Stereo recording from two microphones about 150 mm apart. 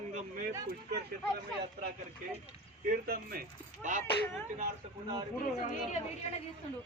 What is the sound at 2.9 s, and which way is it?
Speech, 85° right.